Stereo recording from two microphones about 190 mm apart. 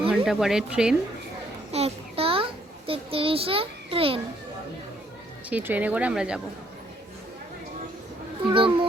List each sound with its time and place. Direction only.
0.3 s speech: centre (ahead or behind)
1.7 s a sound: 30° right (ahead or behind)
5.5 s speech: 10° right (ahead or behind)
8.4 s a child's voice: 25° right (ahead or behind)